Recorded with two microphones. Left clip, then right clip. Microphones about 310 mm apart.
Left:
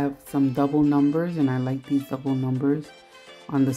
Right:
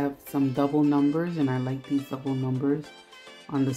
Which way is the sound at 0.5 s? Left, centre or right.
Centre.